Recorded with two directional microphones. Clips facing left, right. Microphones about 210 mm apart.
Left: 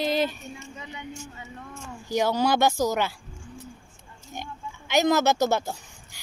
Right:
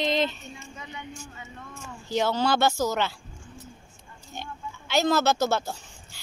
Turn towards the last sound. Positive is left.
turn(degrees=15)  # may be behind; listen again after turning